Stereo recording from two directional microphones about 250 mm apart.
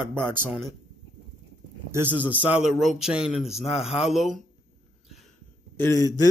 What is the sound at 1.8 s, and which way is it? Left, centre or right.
Speech, centre.